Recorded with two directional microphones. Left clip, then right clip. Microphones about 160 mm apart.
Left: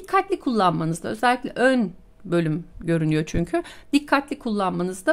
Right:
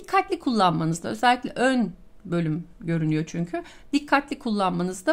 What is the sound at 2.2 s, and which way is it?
Speech, 30° left (ahead or behind).